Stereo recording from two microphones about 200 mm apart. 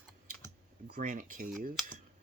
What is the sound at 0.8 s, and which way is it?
Speech, 50° right (ahead or behind).